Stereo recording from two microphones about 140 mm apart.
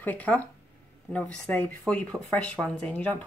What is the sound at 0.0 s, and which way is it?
Speech, 10° left (ahead or behind).